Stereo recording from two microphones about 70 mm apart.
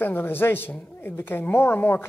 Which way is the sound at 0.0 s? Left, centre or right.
Left.